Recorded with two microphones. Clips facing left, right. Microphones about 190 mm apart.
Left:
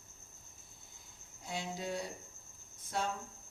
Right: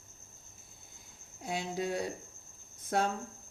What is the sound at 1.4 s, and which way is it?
Speech, 65° right (ahead or behind).